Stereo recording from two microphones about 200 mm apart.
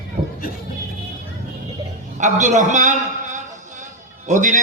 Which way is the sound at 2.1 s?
40° right (ahead or behind).